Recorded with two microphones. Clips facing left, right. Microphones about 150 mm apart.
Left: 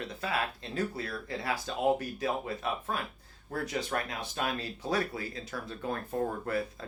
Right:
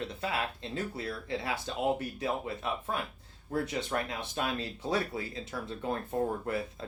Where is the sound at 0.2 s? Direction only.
25° right (ahead or behind).